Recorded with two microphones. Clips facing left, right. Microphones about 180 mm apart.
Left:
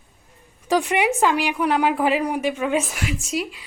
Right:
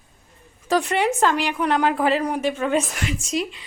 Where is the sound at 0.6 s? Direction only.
15° left (ahead or behind).